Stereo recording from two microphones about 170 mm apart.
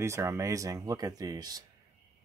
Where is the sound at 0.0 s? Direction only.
15° right (ahead or behind).